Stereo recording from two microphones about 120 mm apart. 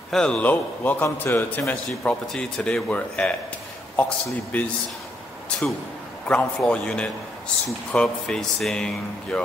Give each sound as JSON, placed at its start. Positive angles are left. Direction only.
{"t": 0.1, "sound": "speech", "side_deg": 10}
{"t": 6.2, "sound": "speech", "side_deg": 10}